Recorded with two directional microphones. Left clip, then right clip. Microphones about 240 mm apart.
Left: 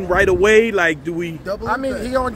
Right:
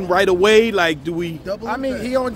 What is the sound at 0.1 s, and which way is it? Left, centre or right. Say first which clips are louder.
Speech: even; centre.